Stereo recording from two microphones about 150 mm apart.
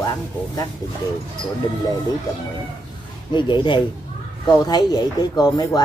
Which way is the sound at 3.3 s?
30° left (ahead or behind).